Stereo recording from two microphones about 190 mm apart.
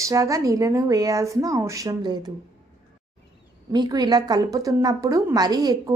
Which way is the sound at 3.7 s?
20° right (ahead or behind).